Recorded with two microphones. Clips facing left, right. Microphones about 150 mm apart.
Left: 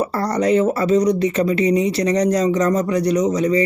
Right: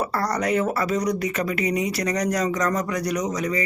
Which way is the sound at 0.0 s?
25° left (ahead or behind).